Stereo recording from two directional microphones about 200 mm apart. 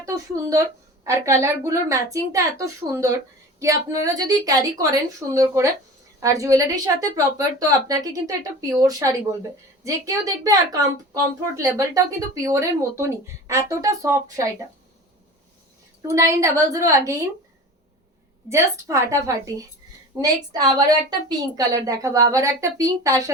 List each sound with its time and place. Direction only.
1.0 s a woman's voice: 15° right (ahead or behind)
16.0 s a woman's voice: 15° right (ahead or behind)
18.4 s a woman's voice: 15° right (ahead or behind)